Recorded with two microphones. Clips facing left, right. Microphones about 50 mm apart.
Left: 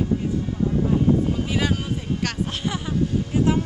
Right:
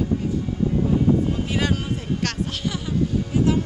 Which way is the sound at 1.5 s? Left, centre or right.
Centre.